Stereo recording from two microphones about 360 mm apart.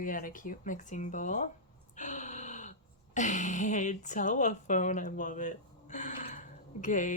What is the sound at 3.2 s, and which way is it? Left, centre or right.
Speech, centre.